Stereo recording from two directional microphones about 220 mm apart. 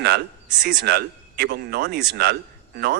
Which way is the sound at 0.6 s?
45° right (ahead or behind).